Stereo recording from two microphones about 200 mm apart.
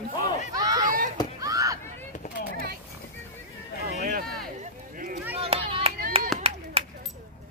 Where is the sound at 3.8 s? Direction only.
45° right (ahead or behind).